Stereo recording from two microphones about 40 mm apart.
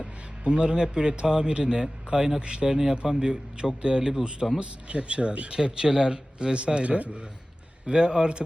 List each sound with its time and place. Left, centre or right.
0.0 s a sound: right
1.2 s a man's voice: centre
5.5 s a man's voice: centre